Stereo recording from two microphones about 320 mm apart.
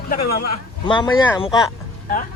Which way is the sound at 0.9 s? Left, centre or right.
Centre.